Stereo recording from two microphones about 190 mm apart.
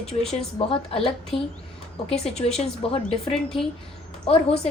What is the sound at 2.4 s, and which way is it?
Speech, 35° left (ahead or behind).